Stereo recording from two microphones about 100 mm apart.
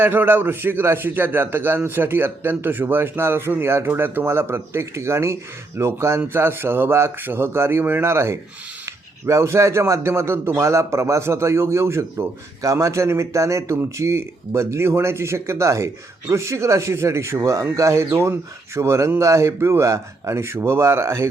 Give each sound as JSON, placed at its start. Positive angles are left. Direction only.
{"t": 0.0, "sound": "a man's voice", "side_deg": -20}